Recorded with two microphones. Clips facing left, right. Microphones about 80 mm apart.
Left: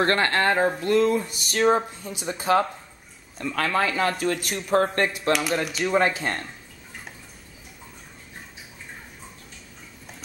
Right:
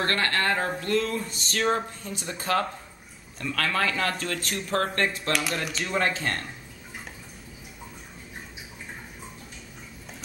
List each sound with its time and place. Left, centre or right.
0.0 s speech: left